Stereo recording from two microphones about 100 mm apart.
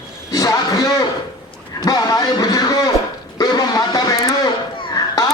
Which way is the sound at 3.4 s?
40° left (ahead or behind).